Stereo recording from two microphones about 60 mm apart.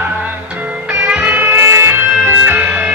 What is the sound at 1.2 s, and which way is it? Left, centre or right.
Music, right.